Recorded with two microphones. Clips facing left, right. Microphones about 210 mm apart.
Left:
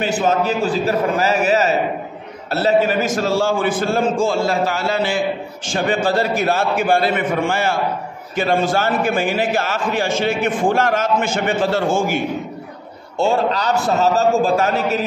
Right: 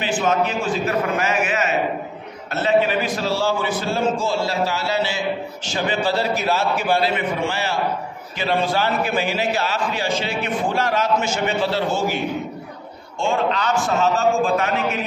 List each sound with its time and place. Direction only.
0.0 s a man's voice: 40° left (ahead or behind)
13.2 s a man's voice: 40° left (ahead or behind)